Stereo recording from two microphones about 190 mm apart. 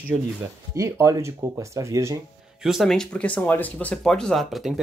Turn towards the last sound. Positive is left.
turn(degrees=0)  # may be behind; listen again after turning